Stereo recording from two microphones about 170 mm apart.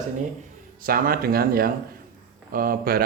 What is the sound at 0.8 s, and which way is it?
A man's voice, 60° right (ahead or behind).